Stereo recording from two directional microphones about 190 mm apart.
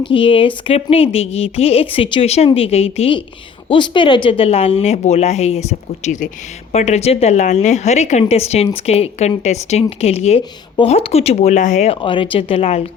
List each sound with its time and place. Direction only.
0.0 s a woman's voice: 25° left (ahead or behind)